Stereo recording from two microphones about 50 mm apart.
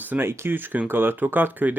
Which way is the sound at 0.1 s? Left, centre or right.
Right.